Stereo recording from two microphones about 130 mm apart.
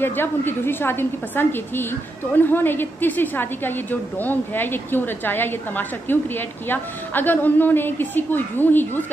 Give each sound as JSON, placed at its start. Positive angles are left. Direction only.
{"t": 0.0, "sound": "a woman's voice", "side_deg": 15}